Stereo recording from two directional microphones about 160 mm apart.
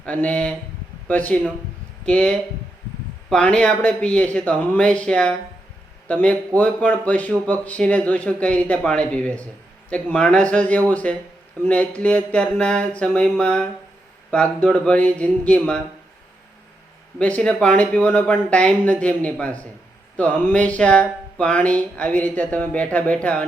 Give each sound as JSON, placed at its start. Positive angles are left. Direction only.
{"t": 0.0, "sound": "speech", "side_deg": 10}
{"t": 17.2, "sound": "speech", "side_deg": 10}